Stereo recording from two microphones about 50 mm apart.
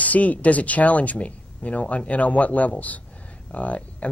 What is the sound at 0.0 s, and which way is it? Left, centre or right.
Speech, left.